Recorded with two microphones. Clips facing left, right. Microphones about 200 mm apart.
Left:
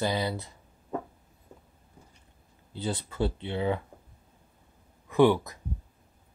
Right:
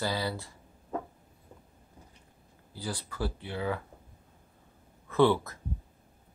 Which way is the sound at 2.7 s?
25° left (ahead or behind).